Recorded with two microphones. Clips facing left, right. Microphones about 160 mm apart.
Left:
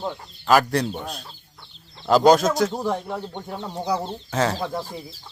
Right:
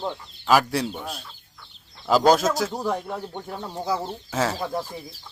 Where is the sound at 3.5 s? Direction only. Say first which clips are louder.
Left 2 dB; 20° left (ahead or behind).